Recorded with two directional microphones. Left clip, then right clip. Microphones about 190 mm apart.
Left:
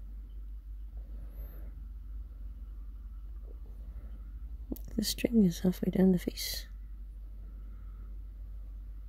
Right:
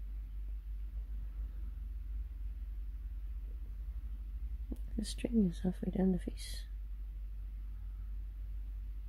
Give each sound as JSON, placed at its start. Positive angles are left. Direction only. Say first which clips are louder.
{"t": 4.6, "sound": "speech", "louder": "left 9 dB", "side_deg": 25}